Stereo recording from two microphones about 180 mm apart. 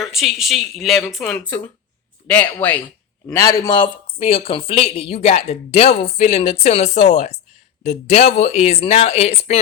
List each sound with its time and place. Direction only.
0.1 s speech: centre (ahead or behind); by 9.6 s 35° left (ahead or behind)